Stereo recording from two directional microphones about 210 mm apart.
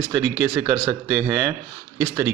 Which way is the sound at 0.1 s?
5° right (ahead or behind).